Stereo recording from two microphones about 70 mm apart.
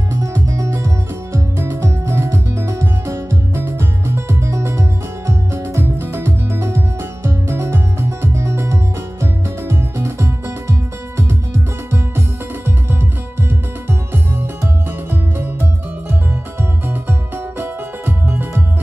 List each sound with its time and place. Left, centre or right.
0.1 s music: right
17.6 s music: right